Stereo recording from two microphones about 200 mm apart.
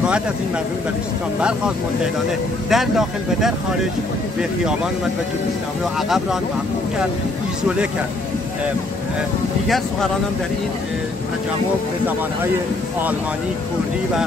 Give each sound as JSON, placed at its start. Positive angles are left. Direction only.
{"t": 2.7, "sound": "speech", "side_deg": 0}
{"t": 5.9, "sound": "speech", "side_deg": 0}
{"t": 9.7, "sound": "speech", "side_deg": 0}